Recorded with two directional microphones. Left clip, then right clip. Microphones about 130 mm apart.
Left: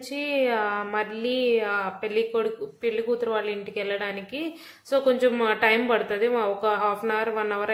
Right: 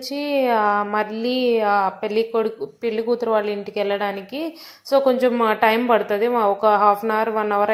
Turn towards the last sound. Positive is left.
turn(degrees=-30)  # may be behind; listen again after turning